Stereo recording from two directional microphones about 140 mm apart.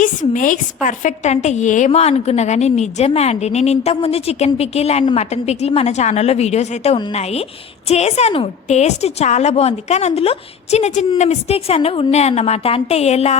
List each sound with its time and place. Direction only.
0.0 s a woman's voice: 70° left (ahead or behind); by 13.3 s 50° left (ahead or behind)